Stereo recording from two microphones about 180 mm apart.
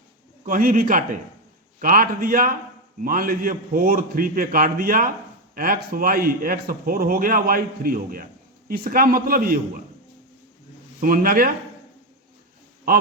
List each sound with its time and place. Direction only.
0.4 s a man's voice: 50° right (ahead or behind)
11.0 s a man's voice: 50° right (ahead or behind)